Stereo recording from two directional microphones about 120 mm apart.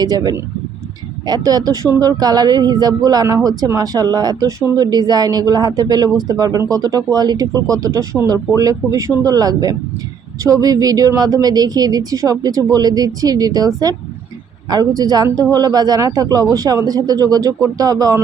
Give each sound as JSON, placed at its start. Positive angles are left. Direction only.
{"t": 0.0, "sound": "speech", "side_deg": -35}